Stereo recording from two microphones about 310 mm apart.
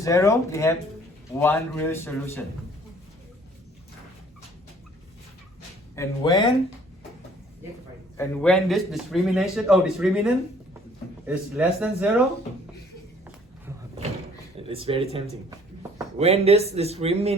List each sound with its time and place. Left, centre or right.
0.0 s speech: centre
6.0 s speech: centre
8.2 s speech: centre
14.7 s speech: centre